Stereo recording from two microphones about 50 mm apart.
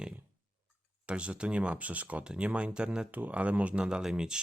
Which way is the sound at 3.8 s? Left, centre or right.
Centre.